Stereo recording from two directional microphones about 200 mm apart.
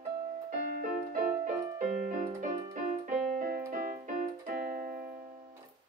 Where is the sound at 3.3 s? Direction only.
45° right (ahead or behind).